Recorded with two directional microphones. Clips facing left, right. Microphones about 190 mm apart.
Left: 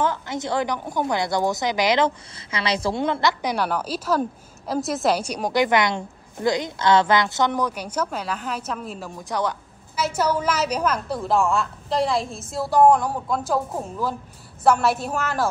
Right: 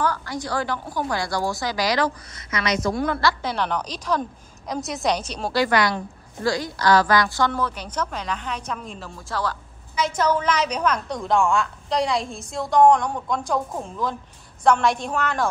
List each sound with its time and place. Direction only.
0.0 s a woman's voice: 20° left (ahead or behind)
3.5 s a woman's voice: 5° left (ahead or behind)
9.1 s a woman's voice: 20° left (ahead or behind)
9.9 s a woman's voice: 5° left (ahead or behind)